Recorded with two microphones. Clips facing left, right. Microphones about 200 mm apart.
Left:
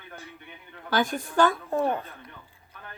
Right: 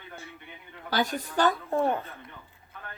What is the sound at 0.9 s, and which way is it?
Speech, 50° left (ahead or behind).